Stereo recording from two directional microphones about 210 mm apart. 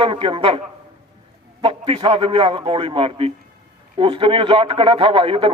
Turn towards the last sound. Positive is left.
turn(degrees=-25)  # may be behind; listen again after turning